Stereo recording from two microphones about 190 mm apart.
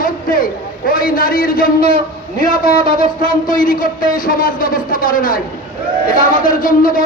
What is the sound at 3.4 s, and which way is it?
A man's voice, 45° left (ahead or behind).